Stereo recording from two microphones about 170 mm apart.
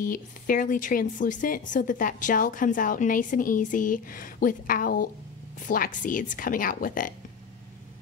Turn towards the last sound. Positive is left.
turn(degrees=55)  # may be behind; listen again after turning